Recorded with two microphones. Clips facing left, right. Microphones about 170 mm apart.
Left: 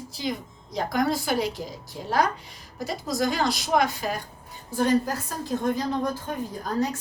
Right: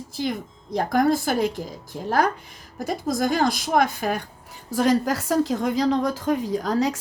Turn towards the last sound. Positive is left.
turn(degrees=-90)